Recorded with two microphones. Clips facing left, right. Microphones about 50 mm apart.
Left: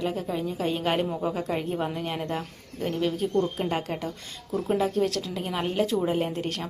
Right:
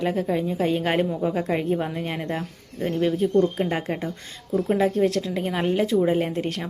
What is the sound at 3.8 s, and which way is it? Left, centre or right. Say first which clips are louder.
Speech: right 3 dB; right.